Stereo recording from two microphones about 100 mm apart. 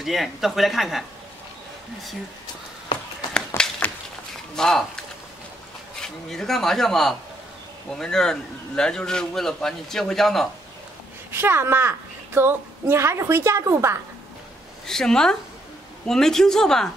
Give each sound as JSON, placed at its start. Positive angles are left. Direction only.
{"t": 0.0, "sound": "a man's voice", "side_deg": 0}
{"t": 3.3, "sound": "a sound", "side_deg": 10}
{"t": 4.6, "sound": "a man's voice", "side_deg": 5}
{"t": 5.9, "sound": "a man's voice", "side_deg": 5}
{"t": 11.3, "sound": "a woman's voice", "side_deg": -25}
{"t": 14.9, "sound": "a man's voice", "side_deg": 5}